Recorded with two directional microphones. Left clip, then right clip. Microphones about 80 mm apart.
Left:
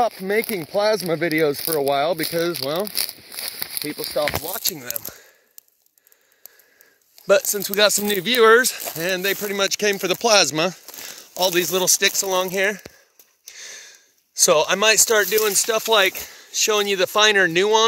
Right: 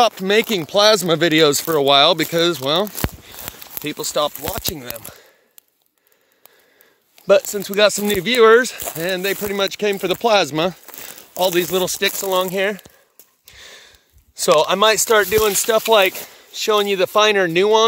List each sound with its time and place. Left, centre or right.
0.0 s speech: right
1.0 s speech: right
2.3 s speech: right
4.6 s speech: centre
7.4 s speech: centre
8.9 s speech: centre
9.2 s speech: centre
13.5 s sniff: right
14.4 s speech: centre
15.5 s speech: right
15.9 s speech: right
16.3 s a sound: centre
16.6 s speech: centre